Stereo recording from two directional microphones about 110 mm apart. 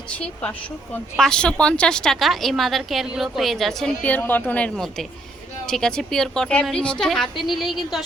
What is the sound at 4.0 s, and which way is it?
A woman's voice, 15° left (ahead or behind).